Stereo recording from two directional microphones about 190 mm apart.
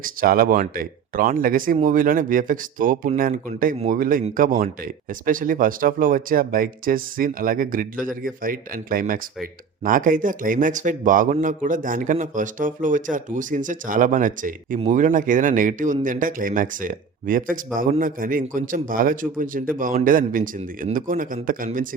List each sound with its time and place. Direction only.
0.0 s speech: 50° right (ahead or behind)